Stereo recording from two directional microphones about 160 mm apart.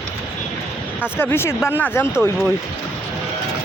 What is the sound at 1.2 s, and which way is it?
Speech, 15° left (ahead or behind).